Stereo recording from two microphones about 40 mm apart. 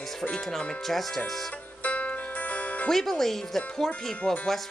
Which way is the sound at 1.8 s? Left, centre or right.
Left.